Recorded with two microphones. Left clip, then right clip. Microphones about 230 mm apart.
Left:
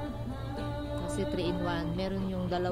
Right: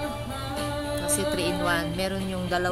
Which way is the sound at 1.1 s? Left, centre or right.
Right.